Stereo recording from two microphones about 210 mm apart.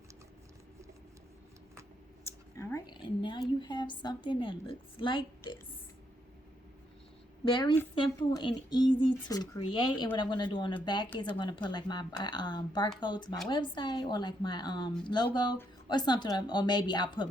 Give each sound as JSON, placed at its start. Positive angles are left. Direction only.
{"t": 2.2, "sound": "a sound", "side_deg": 15}
{"t": 3.6, "sound": "speech", "side_deg": 20}
{"t": 7.4, "sound": "speech", "side_deg": 20}